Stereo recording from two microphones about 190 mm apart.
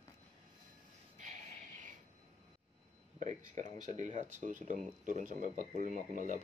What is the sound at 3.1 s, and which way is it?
Speech, 40° right (ahead or behind).